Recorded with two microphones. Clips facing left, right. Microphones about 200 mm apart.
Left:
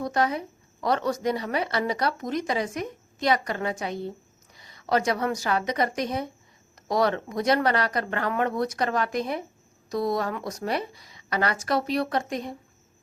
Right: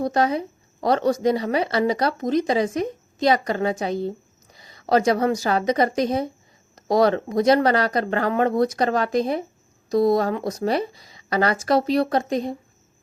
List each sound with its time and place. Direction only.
0.0 s a woman's voice: 35° right (ahead or behind)